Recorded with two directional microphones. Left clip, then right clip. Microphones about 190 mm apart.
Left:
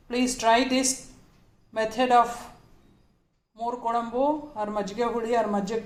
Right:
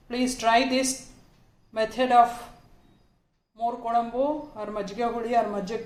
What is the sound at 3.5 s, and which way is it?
A woman's voice, 15° left (ahead or behind).